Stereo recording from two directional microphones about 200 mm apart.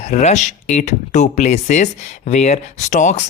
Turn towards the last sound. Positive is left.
turn(degrees=35)  # may be behind; listen again after turning